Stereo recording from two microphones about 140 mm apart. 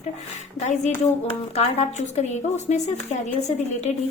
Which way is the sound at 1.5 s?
50° left (ahead or behind).